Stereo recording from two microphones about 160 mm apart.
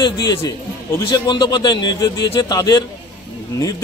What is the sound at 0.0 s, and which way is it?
A man's voice, 25° left (ahead or behind).